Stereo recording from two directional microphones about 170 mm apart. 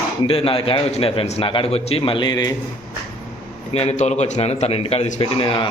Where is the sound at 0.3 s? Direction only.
35° left (ahead or behind).